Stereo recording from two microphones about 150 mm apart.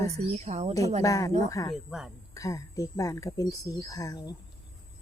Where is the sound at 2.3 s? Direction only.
20° left (ahead or behind).